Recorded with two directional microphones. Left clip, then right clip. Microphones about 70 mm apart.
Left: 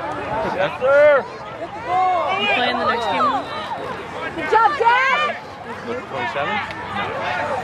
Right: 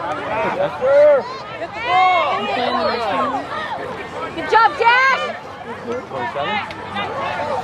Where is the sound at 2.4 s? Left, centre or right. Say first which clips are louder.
Even; left.